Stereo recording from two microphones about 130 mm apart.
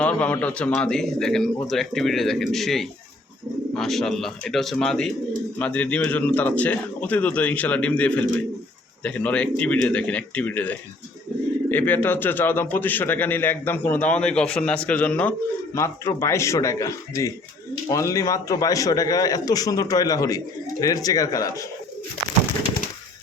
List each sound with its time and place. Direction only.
0.0 s a man's voice: 10° left (ahead or behind)
15.7 s a man's voice: 20° left (ahead or behind)